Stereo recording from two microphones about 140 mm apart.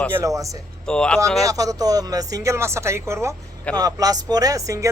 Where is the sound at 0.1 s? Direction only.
20° right (ahead or behind).